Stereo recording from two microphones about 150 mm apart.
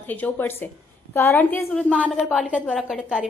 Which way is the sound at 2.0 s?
Centre (ahead or behind).